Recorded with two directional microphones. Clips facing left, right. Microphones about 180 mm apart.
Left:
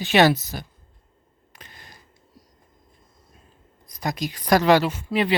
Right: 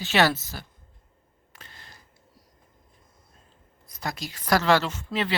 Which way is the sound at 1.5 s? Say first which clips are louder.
Left 3 dB; 15° left (ahead or behind).